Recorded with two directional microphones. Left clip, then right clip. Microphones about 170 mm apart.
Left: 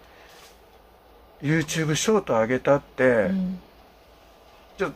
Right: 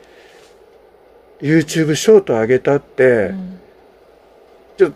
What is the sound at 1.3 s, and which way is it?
Speech, 55° right (ahead or behind).